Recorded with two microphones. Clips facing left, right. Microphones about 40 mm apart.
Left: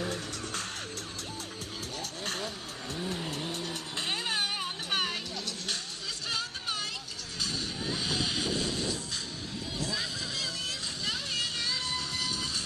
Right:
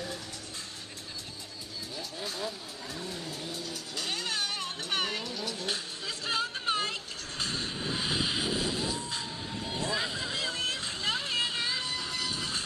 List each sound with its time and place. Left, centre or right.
2.0 s vehicle: left
3.5 s vehicle: left
4.0 s music: left
4.9 s vehicle: centre
6.2 s music: right
7.9 s vehicle: centre
9.8 s vehicle: right
12.0 s music: centre